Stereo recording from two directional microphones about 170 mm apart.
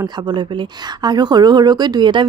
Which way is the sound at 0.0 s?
25° right (ahead or behind).